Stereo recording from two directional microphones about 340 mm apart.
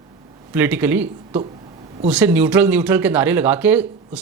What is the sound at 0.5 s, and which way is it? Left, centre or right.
Speech, centre.